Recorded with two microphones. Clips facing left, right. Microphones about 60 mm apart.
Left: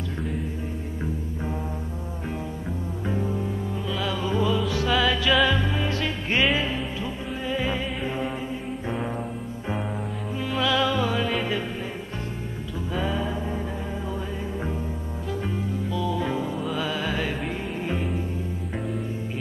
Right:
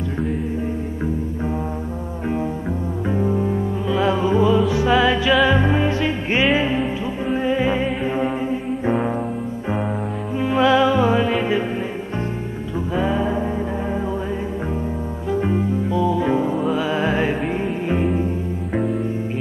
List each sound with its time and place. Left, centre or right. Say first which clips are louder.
3.1 s music: right 8 dB; right
10.4 s music: right 8 dB; right
12.9 s music: right 7 dB; right
15.3 s music: right 10 dB; right